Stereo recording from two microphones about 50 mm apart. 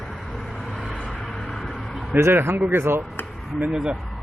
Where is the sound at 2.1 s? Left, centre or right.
Right.